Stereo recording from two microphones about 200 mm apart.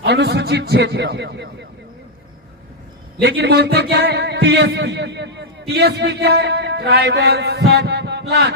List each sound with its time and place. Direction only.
0.0 s a man's voice: 55° right (ahead or behind)
3.2 s a man's voice: 55° right (ahead or behind)